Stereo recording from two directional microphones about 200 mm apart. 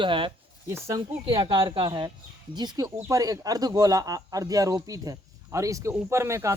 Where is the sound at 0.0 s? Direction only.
25° right (ahead or behind).